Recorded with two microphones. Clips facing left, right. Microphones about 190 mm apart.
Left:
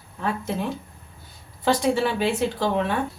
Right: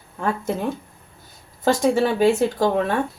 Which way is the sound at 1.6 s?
45° right (ahead or behind).